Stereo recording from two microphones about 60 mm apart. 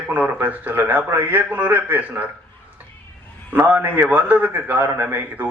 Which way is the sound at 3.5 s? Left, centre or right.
Right.